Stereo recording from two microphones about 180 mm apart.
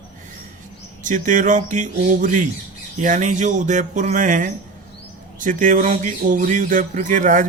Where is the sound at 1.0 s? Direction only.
45° right (ahead or behind).